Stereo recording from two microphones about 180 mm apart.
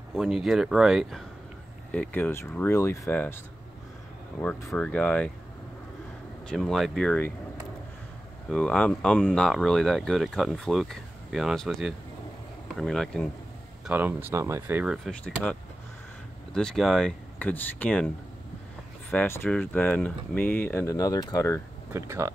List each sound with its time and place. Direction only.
0.1 s speech: centre (ahead or behind)
1.9 s speech: 10° left (ahead or behind)
4.4 s speech: 15° left (ahead or behind)
6.4 s speech: centre (ahead or behind)
8.5 s speech: 5° left (ahead or behind)
13.8 s speech: 10° right (ahead or behind)
16.5 s speech: centre (ahead or behind)
21.9 s speech: 15° right (ahead or behind)